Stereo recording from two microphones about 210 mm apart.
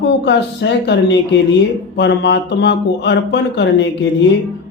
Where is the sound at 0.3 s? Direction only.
55° left (ahead or behind).